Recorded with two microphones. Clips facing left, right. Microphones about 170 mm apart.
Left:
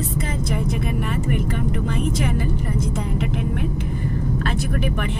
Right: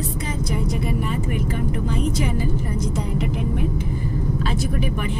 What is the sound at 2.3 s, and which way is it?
Speech, 55° left (ahead or behind).